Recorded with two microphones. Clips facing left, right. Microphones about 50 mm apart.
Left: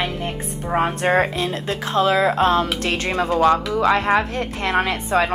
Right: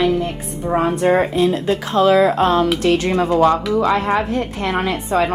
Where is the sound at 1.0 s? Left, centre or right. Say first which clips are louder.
Right 4 dB; left.